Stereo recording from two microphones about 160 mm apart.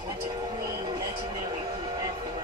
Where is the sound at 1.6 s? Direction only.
25° right (ahead or behind).